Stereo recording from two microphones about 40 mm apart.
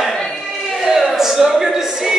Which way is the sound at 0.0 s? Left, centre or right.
Centre.